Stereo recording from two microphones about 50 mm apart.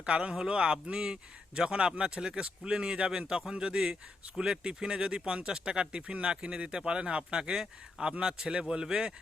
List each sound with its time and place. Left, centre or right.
0.0 s a man's voice: centre